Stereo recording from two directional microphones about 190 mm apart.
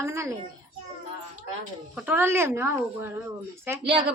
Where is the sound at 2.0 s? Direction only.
10° right (ahead or behind).